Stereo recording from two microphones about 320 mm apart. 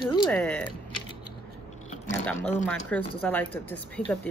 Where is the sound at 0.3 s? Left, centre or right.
Centre.